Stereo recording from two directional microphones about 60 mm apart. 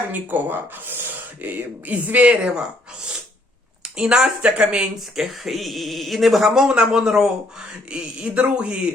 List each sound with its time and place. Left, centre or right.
0.1 s speech: right
3.8 s speech: centre
4.9 s speech: centre